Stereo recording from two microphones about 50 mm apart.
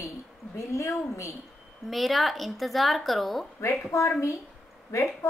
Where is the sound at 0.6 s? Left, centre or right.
Left.